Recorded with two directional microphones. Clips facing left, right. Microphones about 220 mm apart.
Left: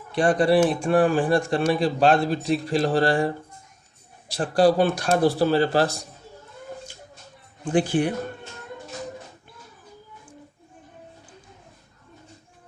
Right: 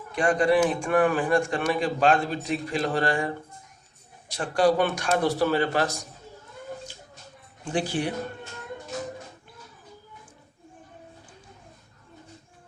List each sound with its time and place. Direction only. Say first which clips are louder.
0.1 s speech: left 3 dB; 35° left (ahead or behind)
4.3 s speech: left 3 dB; 35° left (ahead or behind)
7.7 s speech: left 6 dB; 50° left (ahead or behind)